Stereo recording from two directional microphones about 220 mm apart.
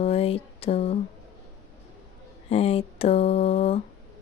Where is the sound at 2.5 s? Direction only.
25° left (ahead or behind).